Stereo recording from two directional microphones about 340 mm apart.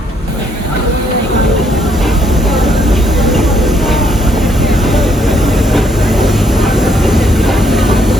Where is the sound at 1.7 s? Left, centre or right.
Centre.